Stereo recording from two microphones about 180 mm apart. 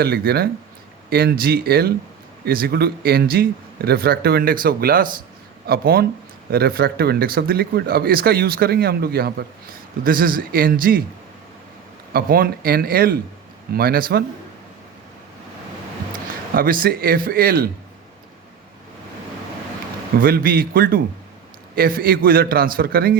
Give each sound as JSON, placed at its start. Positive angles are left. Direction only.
{"t": 0.0, "sound": "a man's voice", "side_deg": -60}
{"t": 12.1, "sound": "speech", "side_deg": -55}
{"t": 16.6, "sound": "a man's voice", "side_deg": -55}
{"t": 20.2, "sound": "speech", "side_deg": -55}